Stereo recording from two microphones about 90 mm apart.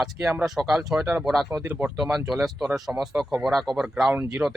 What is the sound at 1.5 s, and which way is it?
Speech, 25° right (ahead or behind).